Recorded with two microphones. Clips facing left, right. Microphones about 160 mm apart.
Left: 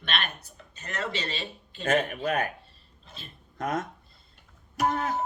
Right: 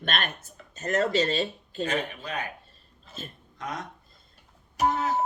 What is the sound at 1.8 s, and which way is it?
Speech, 45° left (ahead or behind).